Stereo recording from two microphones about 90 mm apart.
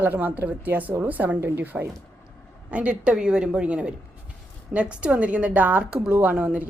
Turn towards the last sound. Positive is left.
turn(degrees=-20)  # may be behind; listen again after turning